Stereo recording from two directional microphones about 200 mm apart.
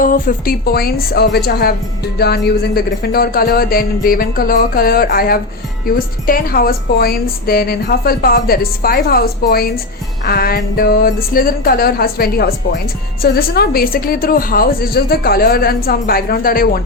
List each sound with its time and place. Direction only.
0.0 s a woman's voice: 45° left (ahead or behind)